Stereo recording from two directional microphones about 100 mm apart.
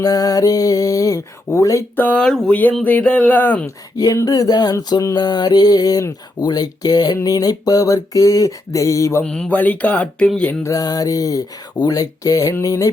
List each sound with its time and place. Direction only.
0.0 s music: 40° left (ahead or behind)
2.0 s speech: 15° left (ahead or behind)
3.9 s music: 35° left (ahead or behind)
9.2 s speech: 10° left (ahead or behind)
10.6 s music: 35° left (ahead or behind)